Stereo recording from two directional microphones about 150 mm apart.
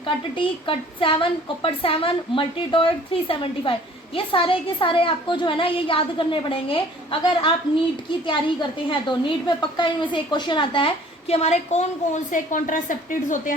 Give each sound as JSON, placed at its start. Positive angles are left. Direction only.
{"t": 0.3, "sound": "a woman's voice", "side_deg": 35}
{"t": 8.9, "sound": "a woman's voice", "side_deg": 30}